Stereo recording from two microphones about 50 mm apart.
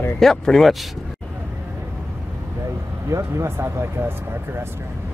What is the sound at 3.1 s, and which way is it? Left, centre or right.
Speech, right.